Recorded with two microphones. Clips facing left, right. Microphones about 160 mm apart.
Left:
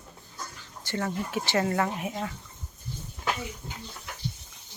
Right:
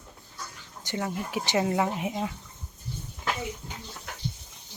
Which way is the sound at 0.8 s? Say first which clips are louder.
Even; 15° right (ahead or behind).